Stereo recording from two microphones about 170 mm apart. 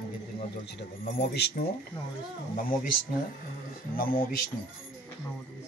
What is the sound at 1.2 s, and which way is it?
Speech, 75° left (ahead or behind).